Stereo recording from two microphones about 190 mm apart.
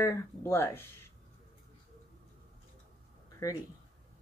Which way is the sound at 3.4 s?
15° left (ahead or behind).